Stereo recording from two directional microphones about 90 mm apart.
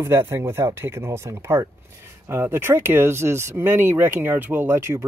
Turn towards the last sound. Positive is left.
turn(degrees=-30)  # may be behind; listen again after turning